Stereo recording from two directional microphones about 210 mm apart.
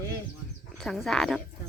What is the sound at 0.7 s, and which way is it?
Speech, centre (ahead or behind).